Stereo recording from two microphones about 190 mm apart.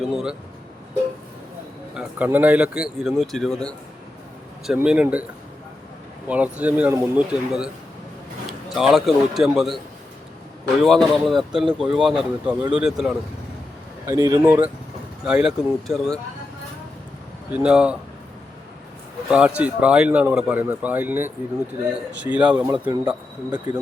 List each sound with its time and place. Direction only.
0.0 s speech: centre (ahead or behind)
2.0 s speech: 10° right (ahead or behind)
6.2 s a man's voice: 5° right (ahead or behind)
10.8 s speech: centre (ahead or behind)
14.1 s speech: 15° right (ahead or behind); by 16.2 s centre (ahead or behind)
17.5 s speech: 5° right (ahead or behind)
19.3 s speech: 5° right (ahead or behind)
22.9 s speech: 25° right (ahead or behind)